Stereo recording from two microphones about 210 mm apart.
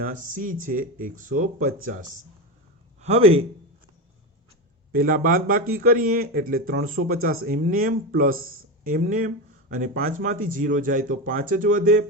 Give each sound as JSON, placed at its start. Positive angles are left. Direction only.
{"t": 0.0, "sound": "speech", "side_deg": -40}
{"t": 3.0, "sound": "speech", "side_deg": -30}
{"t": 4.9, "sound": "speech", "side_deg": -45}